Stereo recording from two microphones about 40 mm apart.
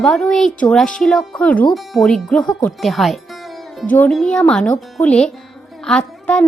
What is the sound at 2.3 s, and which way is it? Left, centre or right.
Speech, centre.